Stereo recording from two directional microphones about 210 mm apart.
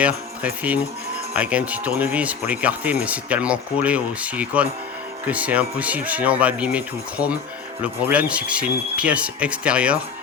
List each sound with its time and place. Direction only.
0.0 s speech: 5° right (ahead or behind)